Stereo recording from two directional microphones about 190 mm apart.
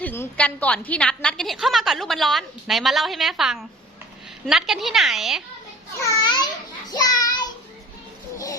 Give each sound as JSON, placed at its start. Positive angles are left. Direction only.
{"t": 0.0, "sound": "a woman's voice", "side_deg": 10}
{"t": 6.1, "sound": "a child's voice", "side_deg": 20}